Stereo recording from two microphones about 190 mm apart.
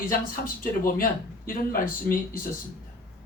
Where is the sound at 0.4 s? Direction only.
45° left (ahead or behind).